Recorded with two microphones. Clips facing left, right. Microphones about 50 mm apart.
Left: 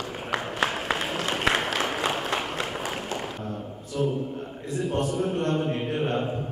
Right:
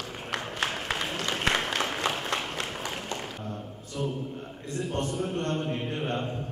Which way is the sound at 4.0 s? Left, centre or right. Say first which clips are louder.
Left 6 dB; left.